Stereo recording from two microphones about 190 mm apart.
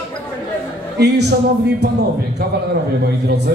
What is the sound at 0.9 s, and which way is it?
Speech, 60° right (ahead or behind).